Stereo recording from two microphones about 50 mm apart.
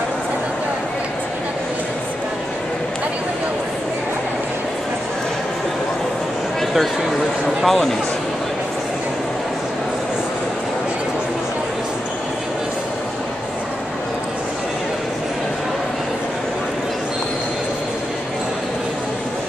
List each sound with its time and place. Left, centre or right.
6.7 s speech: centre